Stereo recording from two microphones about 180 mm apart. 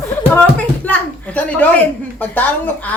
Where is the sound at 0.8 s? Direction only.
10° left (ahead or behind).